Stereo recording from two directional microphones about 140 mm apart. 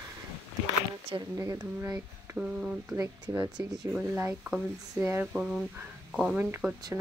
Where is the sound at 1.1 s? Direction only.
40° right (ahead or behind).